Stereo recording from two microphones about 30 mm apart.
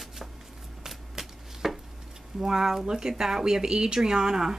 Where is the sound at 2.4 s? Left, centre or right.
Centre.